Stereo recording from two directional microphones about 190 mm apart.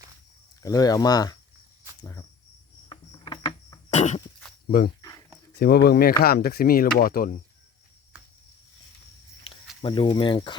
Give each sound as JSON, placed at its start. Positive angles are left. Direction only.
{"t": 0.6, "sound": "speech", "side_deg": 20}
{"t": 2.9, "sound": "cricket", "side_deg": 25}
{"t": 5.5, "sound": "speech", "side_deg": 55}
{"t": 9.8, "sound": "speech", "side_deg": 25}